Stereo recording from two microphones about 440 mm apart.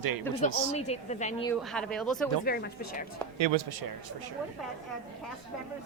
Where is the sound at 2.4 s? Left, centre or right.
Left.